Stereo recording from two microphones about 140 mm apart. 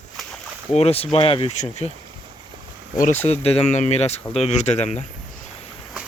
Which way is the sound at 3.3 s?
50° left (ahead or behind).